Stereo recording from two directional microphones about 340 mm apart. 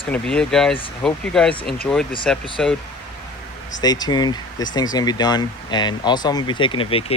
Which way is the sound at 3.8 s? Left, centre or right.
Centre.